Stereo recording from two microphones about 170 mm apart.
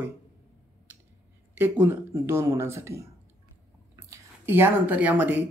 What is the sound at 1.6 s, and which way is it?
Speech, 10° right (ahead or behind).